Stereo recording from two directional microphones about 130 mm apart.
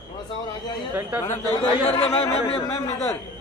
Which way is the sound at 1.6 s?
50° left (ahead or behind).